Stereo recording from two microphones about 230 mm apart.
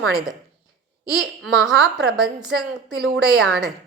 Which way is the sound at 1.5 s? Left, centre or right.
Centre.